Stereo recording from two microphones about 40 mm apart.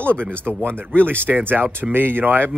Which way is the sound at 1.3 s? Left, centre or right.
Right.